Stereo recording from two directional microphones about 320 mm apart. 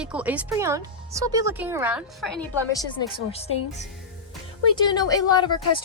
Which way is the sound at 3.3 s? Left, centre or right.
Centre.